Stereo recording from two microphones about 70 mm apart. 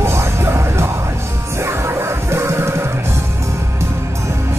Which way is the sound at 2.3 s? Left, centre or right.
Right.